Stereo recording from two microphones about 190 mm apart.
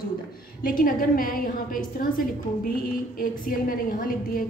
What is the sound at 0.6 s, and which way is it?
A woman's voice, 45° left (ahead or behind).